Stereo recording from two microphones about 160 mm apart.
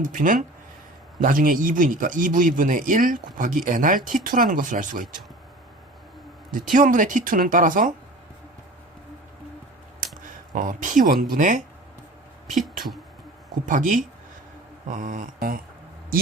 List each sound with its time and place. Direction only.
0.0 s speech: 55° right (ahead or behind)
6.5 s speech: 55° right (ahead or behind)
10.0 s speech: 55° right (ahead or behind)
13.7 s mantra: 55° right (ahead or behind)